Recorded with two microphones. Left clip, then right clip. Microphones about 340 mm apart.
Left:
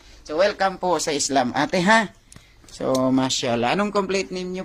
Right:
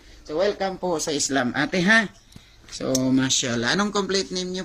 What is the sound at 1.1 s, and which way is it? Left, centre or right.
Speech, centre.